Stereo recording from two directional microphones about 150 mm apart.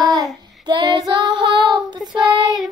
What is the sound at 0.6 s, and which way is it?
Child singing, 30° right (ahead or behind).